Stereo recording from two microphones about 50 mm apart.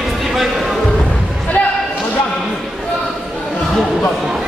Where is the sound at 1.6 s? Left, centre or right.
Left.